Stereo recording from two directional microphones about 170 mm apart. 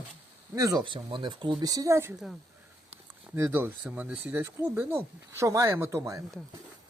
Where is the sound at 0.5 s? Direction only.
20° right (ahead or behind).